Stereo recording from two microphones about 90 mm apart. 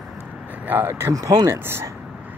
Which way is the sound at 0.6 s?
25° right (ahead or behind).